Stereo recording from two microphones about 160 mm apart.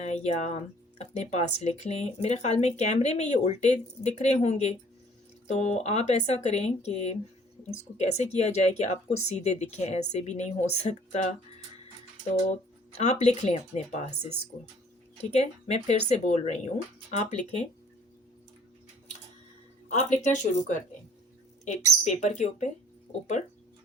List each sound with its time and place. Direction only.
0.0 s speech: 45° left (ahead or behind)
12.9 s speech: 45° left (ahead or behind)
15.3 s speech: 40° left (ahead or behind)
20.0 s speech: 50° left (ahead or behind)
22.0 s speech: 50° left (ahead or behind)